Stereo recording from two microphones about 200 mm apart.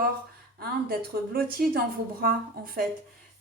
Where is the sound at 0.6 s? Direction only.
50° right (ahead or behind).